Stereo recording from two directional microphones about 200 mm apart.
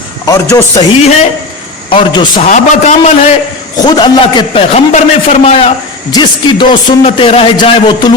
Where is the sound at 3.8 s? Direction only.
20° left (ahead or behind).